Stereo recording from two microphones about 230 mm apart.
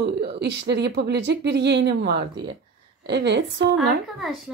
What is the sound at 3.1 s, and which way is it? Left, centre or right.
Speech, right.